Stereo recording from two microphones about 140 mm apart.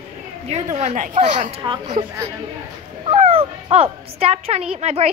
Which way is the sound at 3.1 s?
45° right (ahead or behind).